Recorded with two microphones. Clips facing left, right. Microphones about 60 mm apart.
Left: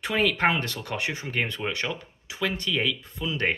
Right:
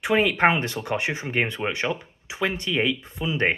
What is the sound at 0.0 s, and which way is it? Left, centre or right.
Speech, centre.